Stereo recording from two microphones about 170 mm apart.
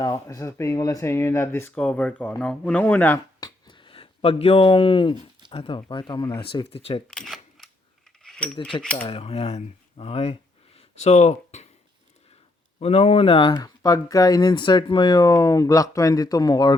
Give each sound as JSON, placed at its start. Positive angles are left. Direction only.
{"t": 0.0, "sound": "speech", "side_deg": 20}
{"t": 3.4, "sound": "a sound", "side_deg": 30}
{"t": 5.5, "sound": "speech", "side_deg": 30}
{"t": 7.1, "sound": "camera", "side_deg": 0}
{"t": 8.2, "sound": "keys jangling", "side_deg": 5}
{"t": 8.8, "sound": "speech", "side_deg": 5}
{"t": 9.0, "sound": "speech", "side_deg": 35}
{"t": 10.8, "sound": "a sound", "side_deg": 40}
{"t": 12.8, "sound": "speech", "side_deg": 35}